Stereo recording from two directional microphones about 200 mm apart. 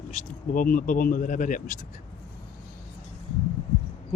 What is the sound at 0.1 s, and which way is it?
Speech, 40° left (ahead or behind).